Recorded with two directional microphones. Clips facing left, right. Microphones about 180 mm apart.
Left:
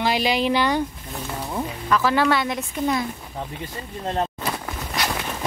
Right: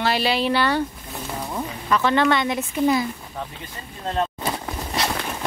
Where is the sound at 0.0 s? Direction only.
15° left (ahead or behind).